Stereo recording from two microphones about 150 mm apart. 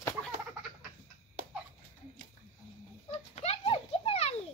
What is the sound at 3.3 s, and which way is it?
Children playing, 45° left (ahead or behind).